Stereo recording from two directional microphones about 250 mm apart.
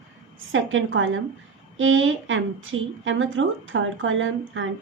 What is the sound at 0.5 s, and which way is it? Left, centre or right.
A woman's voice, right.